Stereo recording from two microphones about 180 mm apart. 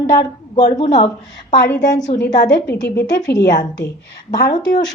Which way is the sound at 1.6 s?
20° left (ahead or behind).